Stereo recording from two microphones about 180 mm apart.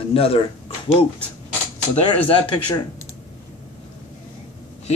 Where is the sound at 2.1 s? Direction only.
30° left (ahead or behind).